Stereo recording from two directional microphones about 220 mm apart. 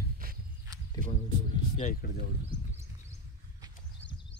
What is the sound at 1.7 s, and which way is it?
Speech, 35° left (ahead or behind).